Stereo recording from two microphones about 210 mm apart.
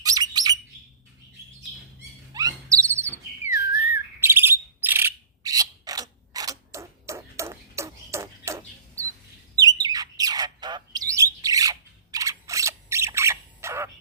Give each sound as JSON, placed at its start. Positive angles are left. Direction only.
{"t": 0.0, "sound": "bird", "side_deg": -15}
{"t": 2.3, "sound": "wail", "side_deg": -15}
{"t": 4.2, "sound": "bird", "side_deg": -10}